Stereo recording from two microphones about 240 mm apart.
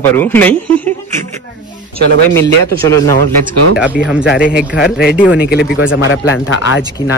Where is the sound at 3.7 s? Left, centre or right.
Centre.